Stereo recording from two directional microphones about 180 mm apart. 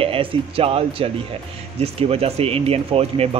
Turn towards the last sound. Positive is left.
turn(degrees=-35)  # may be behind; listen again after turning